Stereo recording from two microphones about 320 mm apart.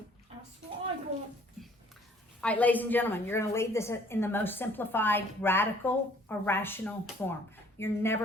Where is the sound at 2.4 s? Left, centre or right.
Centre.